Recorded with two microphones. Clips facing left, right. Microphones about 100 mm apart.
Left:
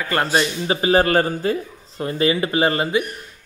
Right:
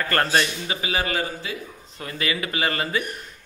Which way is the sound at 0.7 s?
35° left (ahead or behind).